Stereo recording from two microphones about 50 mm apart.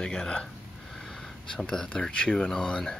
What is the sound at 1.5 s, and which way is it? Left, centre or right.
Speech, centre.